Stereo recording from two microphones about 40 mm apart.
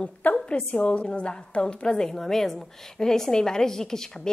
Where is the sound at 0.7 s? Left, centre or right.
Left.